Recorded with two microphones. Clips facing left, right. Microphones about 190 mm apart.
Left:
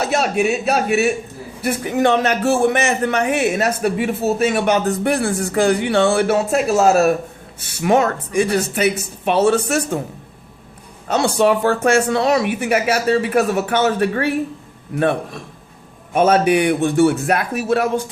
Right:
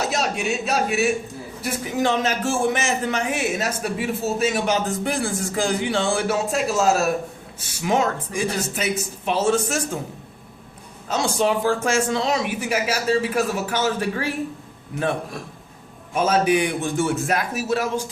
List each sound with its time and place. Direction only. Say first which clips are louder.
0.0 s a man's voice: left 6 dB; 60° left (ahead or behind)
11.1 s a man's voice: left 5 dB; 65° left (ahead or behind)
16.1 s a man's voice: left 5 dB; 60° left (ahead or behind)